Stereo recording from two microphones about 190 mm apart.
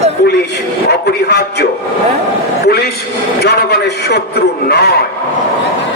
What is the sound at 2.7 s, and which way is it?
A man's voice, 55° left (ahead or behind).